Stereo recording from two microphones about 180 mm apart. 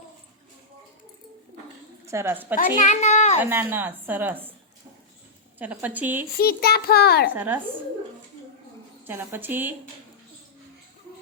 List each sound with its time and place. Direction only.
2.0 s a woman's voice: 15° right (ahead or behind)
2.8 s a child's voice: 40° left (ahead or behind)
3.4 s a woman's voice: 10° right (ahead or behind)
5.5 s a woman's voice: 10° right (ahead or behind)
6.3 s a child's voice: 55° left (ahead or behind)
7.3 s a woman's voice: 10° right (ahead or behind)
9.0 s a woman's voice: 10° right (ahead or behind)